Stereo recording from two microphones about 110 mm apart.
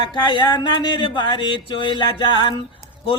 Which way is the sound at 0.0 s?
45° left (ahead or behind).